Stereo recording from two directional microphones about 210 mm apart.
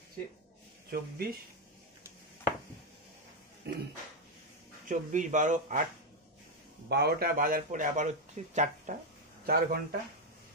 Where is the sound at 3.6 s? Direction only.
50° right (ahead or behind).